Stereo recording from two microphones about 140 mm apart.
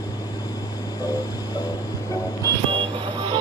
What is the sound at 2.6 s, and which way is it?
Vehicle, 35° right (ahead or behind).